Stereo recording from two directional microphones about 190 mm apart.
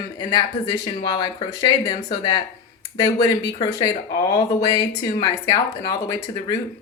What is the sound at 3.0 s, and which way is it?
A woman's voice, 20° left (ahead or behind).